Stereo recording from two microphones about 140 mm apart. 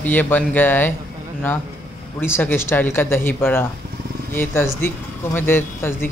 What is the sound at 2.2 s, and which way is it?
Speech, 15° left (ahead or behind).